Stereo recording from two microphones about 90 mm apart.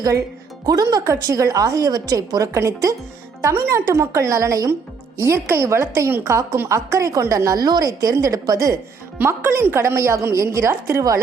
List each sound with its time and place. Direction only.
0.6 s a woman's voice: 45° right (ahead or behind)
9.1 s a woman's voice: 20° right (ahead or behind)